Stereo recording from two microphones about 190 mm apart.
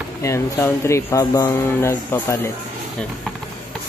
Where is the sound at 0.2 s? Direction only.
15° left (ahead or behind).